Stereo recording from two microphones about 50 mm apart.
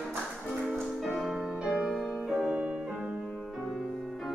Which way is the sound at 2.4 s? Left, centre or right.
Centre.